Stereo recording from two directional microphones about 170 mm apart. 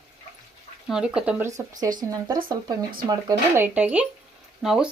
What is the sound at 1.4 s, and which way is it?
Speech, 20° right (ahead or behind).